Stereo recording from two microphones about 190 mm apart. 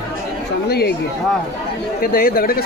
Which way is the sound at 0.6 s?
55° left (ahead or behind).